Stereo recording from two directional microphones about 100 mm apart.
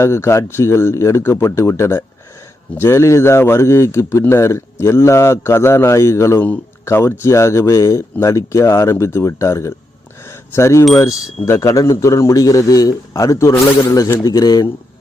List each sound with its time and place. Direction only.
0.0 s a man's voice: 25° left (ahead or behind)
10.2 s a sound: 25° left (ahead or behind)
11.4 s a man's voice: 30° left (ahead or behind)